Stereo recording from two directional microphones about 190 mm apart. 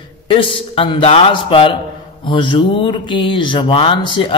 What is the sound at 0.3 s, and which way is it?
Speech, 30° left (ahead or behind).